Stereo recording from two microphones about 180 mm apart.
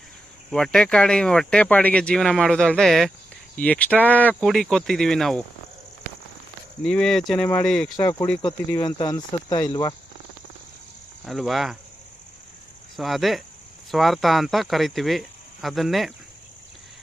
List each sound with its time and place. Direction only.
0.5 s speech: 5° left (ahead or behind)
6.8 s speech: 5° left (ahead or behind)
7.9 s speech: 20° left (ahead or behind)
11.3 s speech: centre (ahead or behind)
13.0 s speech: centre (ahead or behind)